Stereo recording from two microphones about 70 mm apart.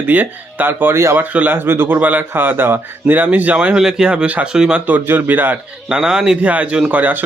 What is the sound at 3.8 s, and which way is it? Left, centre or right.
Speech, centre.